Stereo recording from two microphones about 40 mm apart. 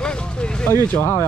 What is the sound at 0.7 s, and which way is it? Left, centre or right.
Speech, left.